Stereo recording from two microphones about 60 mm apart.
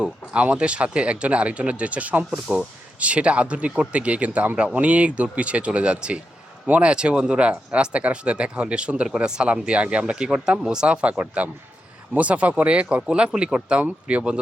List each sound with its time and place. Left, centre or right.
0.0 s speech: right
11.2 s speech: right